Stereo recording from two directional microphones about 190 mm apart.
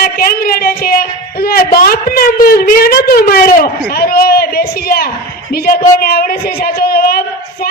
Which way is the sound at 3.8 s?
55° left (ahead or behind).